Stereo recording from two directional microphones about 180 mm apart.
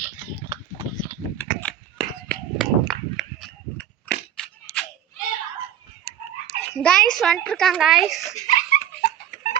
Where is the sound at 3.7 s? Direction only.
5° left (ahead or behind).